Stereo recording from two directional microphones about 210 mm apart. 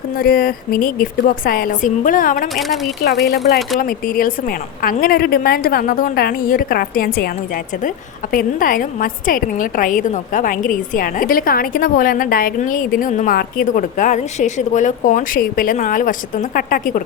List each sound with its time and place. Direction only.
0.2 s a woman's voice: 45° left (ahead or behind)
2.6 s a woman's voice: centre (ahead or behind)
3.0 s a woman's voice: 50° left (ahead or behind)